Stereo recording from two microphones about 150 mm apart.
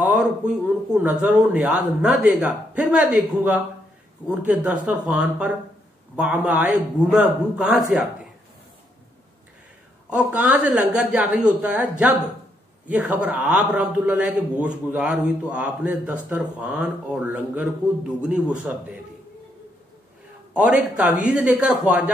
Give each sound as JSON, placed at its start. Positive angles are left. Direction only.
{"t": 0.0, "sound": "a man's voice", "side_deg": -5}
{"t": 10.0, "sound": "a man's voice", "side_deg": -10}
{"t": 20.5, "sound": "a man's voice", "side_deg": -10}